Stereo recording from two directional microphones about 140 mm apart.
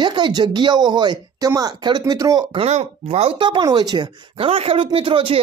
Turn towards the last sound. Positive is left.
turn(degrees=-40)  # may be behind; listen again after turning